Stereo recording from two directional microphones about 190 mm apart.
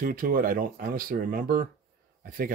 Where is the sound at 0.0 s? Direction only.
45° right (ahead or behind).